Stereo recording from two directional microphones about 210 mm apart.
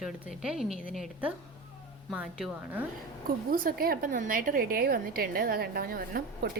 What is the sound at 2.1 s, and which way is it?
Speech, 5° right (ahead or behind).